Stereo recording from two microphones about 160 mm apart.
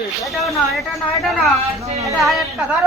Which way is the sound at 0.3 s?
Centre (ahead or behind).